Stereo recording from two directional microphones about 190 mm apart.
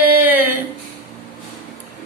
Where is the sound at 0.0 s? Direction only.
10° right (ahead or behind).